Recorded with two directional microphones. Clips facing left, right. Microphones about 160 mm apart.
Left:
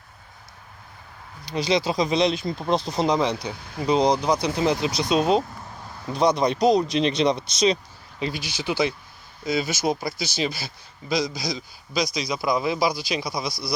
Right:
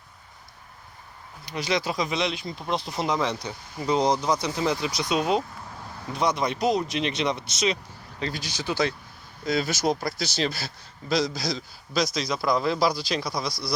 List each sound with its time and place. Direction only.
1.5 s speech: 30° left (ahead or behind)
2.9 s speech: 20° left (ahead or behind)
8.2 s speech: 10° left (ahead or behind)
12.3 s speech: 15° left (ahead or behind)